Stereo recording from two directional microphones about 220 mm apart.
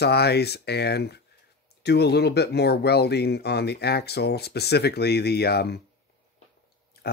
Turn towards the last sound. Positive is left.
turn(degrees=45)  # may be behind; listen again after turning